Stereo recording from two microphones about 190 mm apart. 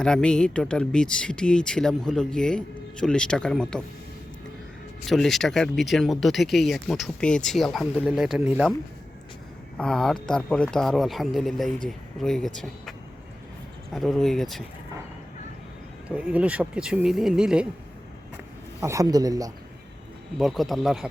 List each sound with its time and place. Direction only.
0.0 s speech: 5° left (ahead or behind)
5.0 s speech: centre (ahead or behind)
9.7 s speech: 5° left (ahead or behind)
13.9 s speech: centre (ahead or behind)
16.0 s speech: 5° right (ahead or behind)
18.8 s speech: 15° right (ahead or behind)
20.4 s speech: centre (ahead or behind)